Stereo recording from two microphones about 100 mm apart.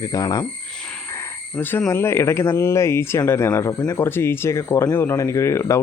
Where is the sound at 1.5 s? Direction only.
15° left (ahead or behind).